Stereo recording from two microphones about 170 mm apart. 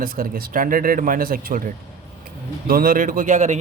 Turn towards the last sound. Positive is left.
turn(degrees=-45)  # may be behind; listen again after turning